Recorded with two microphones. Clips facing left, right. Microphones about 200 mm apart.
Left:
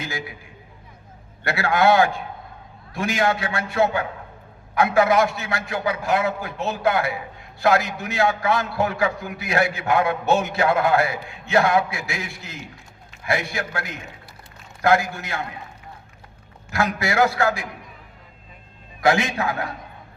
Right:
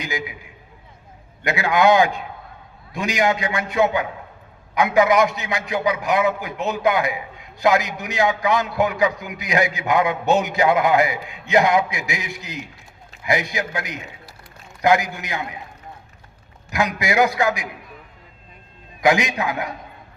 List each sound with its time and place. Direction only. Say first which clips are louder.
0.0 s a sound: right 3 dB; 15° right (ahead or behind)
1.5 s a man's voice: right 2 dB; 15° right (ahead or behind)
16.6 s a man's voice: right 1 dB; 15° right (ahead or behind)
19.0 s a man's voice: right 1 dB; 15° right (ahead or behind)